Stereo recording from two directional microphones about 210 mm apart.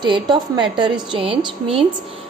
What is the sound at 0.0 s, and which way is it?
A woman's voice, 20° right (ahead or behind).